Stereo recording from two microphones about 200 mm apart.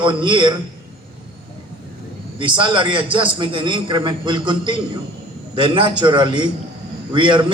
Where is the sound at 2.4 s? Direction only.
25° right (ahead or behind).